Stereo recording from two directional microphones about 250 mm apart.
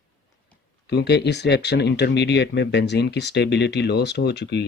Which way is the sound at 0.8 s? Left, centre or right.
Left.